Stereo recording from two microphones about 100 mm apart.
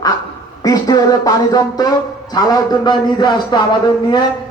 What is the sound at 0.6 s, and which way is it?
A man's voice, 35° left (ahead or behind).